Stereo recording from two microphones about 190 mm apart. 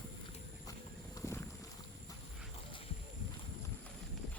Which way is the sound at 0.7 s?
15° left (ahead or behind).